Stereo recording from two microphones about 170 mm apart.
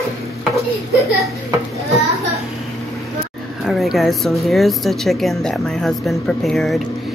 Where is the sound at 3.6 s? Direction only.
Centre (ahead or behind).